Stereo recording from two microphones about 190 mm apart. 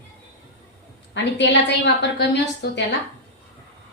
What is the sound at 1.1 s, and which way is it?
A woman's voice, 70° left (ahead or behind).